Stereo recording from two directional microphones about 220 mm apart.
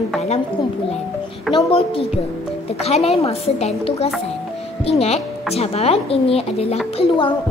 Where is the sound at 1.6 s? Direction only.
25° left (ahead or behind).